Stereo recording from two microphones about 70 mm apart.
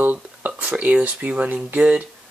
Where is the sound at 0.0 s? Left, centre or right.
Right.